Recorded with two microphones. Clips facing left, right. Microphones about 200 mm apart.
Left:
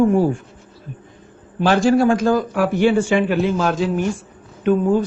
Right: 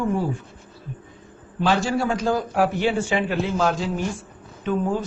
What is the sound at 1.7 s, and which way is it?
Speech, 55° left (ahead or behind).